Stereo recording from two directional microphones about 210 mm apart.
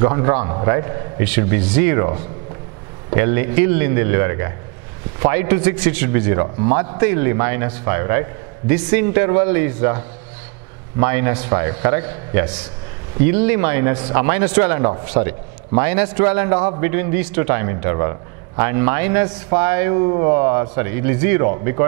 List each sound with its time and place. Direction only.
0.0 s a man's voice: 20° right (ahead or behind)
11.0 s a man's voice: 15° right (ahead or behind)